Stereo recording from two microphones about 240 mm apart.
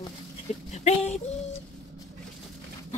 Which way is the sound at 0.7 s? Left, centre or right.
Left.